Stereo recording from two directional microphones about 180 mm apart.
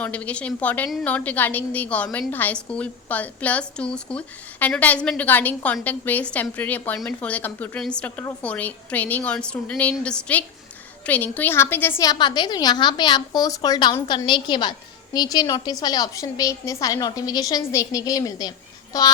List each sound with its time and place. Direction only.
0.0 s a woman's voice: 10° left (ahead or behind)